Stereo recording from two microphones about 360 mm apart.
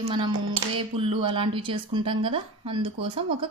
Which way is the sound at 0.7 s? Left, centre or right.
Centre.